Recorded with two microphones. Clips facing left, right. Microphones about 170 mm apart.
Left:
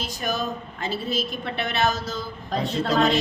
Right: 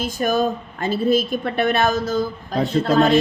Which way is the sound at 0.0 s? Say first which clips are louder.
Right 8 dB; 50° right (ahead or behind).